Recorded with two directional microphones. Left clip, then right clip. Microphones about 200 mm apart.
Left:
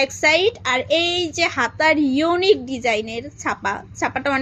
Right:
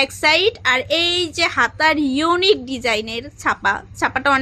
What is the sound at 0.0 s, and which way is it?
A woman's voice, 15° right (ahead or behind).